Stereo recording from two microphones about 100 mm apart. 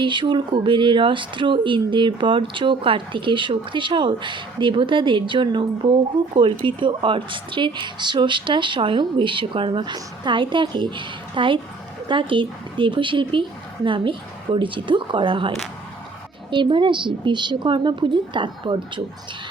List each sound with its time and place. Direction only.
0.0 s a woman's voice: 50° right (ahead or behind)